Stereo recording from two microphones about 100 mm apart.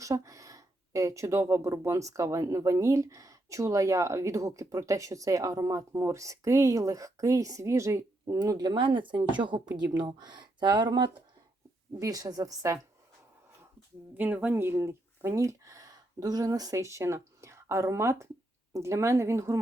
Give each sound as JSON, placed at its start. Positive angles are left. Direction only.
{"t": 0.0, "sound": "speech", "side_deg": -35}
{"t": 8.4, "sound": "speech", "side_deg": -45}
{"t": 11.9, "sound": "speech", "side_deg": -35}
{"t": 14.1, "sound": "speech", "side_deg": -20}